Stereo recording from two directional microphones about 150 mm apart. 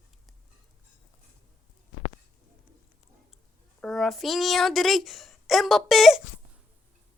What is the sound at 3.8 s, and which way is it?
A child's voice, centre (ahead or behind).